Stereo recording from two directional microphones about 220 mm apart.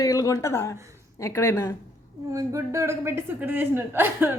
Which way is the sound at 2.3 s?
15° right (ahead or behind).